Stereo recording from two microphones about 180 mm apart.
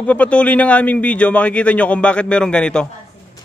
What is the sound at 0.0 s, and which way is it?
A man's voice, 5° left (ahead or behind).